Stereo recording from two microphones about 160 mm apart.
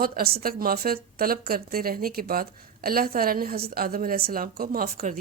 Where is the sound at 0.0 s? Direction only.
70° right (ahead or behind).